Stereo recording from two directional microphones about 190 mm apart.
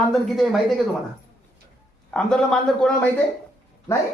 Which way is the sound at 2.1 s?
5° left (ahead or behind).